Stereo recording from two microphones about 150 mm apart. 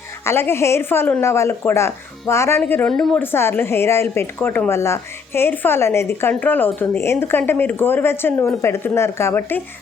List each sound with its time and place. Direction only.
0.3 s a woman's voice: 15° left (ahead or behind); by 3.2 s centre (ahead or behind)
3.2 s a woman's voice: 15° left (ahead or behind)